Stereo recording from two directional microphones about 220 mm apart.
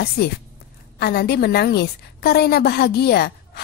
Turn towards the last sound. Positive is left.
turn(degrees=45)  # may be behind; listen again after turning